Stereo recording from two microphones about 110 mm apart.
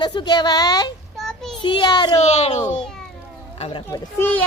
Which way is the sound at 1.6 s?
45° left (ahead or behind).